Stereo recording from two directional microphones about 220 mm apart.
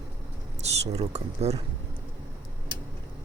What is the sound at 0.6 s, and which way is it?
Speech, 30° right (ahead or behind).